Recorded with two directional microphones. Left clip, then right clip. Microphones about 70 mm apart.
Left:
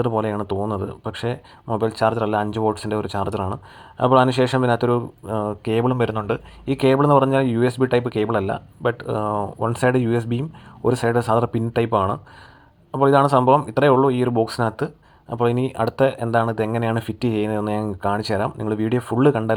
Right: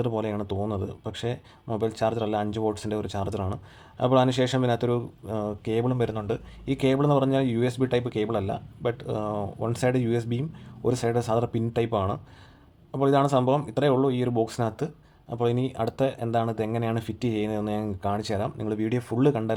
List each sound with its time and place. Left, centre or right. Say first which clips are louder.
0.2 s speech: left 6 dB; left
5.9 s speech: left 6 dB; centre
6.7 s speech: left 7 dB; left
9.7 s speech: left 6 dB; left
13.7 s speech: left 7 dB; left
15.3 s speech: left 6 dB; left